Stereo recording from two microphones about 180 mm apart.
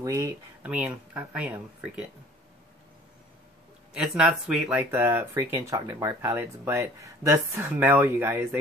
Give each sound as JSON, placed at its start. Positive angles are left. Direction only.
{"t": 0.0, "sound": "speech", "side_deg": -20}
{"t": 0.6, "sound": "speech", "side_deg": -5}
{"t": 3.9, "sound": "speech", "side_deg": -5}